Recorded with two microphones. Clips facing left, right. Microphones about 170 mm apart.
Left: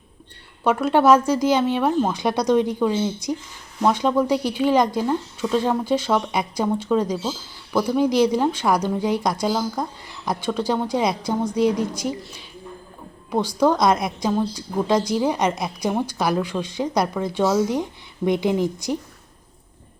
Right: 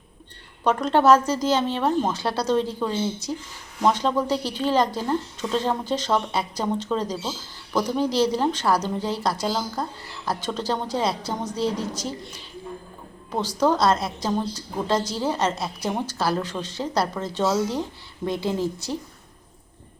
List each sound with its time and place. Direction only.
0.6 s a woman's voice: 10° left (ahead or behind)
13.6 s a woman's voice: 15° left (ahead or behind)